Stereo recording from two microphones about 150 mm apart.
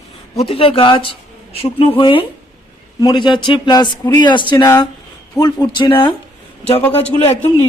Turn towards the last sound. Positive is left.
turn(degrees=45)  # may be behind; listen again after turning